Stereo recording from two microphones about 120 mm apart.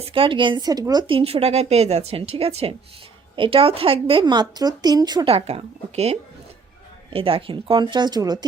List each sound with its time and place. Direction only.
0.0 s speech: 50° right (ahead or behind)
5.2 s speech: 55° right (ahead or behind); by 8.4 s 35° right (ahead or behind)